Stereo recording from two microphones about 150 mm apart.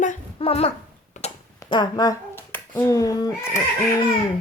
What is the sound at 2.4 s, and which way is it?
A child's voice, 15° left (ahead or behind).